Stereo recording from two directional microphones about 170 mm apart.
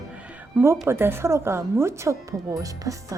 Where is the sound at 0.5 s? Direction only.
15° right (ahead or behind).